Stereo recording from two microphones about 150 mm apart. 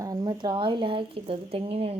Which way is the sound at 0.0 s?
25° right (ahead or behind).